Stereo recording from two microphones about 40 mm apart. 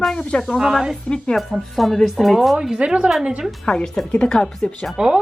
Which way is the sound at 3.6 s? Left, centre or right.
Centre.